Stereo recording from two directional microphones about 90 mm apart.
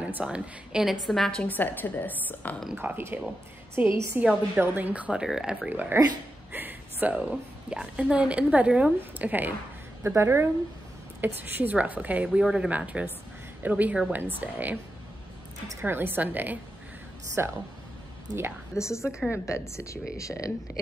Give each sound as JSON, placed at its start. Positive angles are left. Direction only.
{"t": 0.0, "sound": "a woman's voice", "side_deg": -10}
{"t": 1.0, "sound": "a woman's voice", "side_deg": 5}
{"t": 1.4, "sound": "a woman's voice", "side_deg": 20}
{"t": 2.7, "sound": "a woman's voice", "side_deg": -25}
{"t": 5.7, "sound": "a woman's voice", "side_deg": -20}
{"t": 15.8, "sound": "a woman's voice", "side_deg": -25}
{"t": 18.3, "sound": "a woman's voice", "side_deg": -40}
{"t": 18.8, "sound": "speech", "side_deg": 35}
{"t": 19.0, "sound": "a woman's voice", "side_deg": -10}
{"t": 19.3, "sound": "speech", "side_deg": 30}